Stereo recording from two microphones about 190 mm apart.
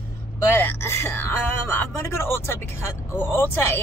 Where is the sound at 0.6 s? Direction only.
10° left (ahead or behind).